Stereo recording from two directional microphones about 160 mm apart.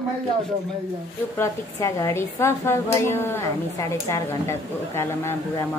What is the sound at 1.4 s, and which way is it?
A woman's voice, 20° left (ahead or behind).